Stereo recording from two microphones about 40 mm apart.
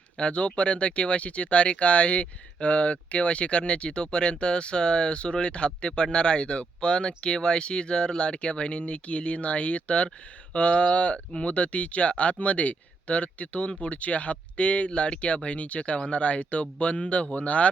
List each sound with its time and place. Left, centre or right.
0.2 s speech: left